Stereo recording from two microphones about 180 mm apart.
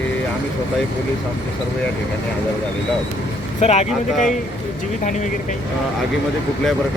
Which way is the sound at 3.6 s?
40° left (ahead or behind).